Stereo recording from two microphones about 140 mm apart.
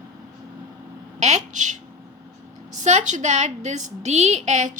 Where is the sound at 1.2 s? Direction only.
60° right (ahead or behind).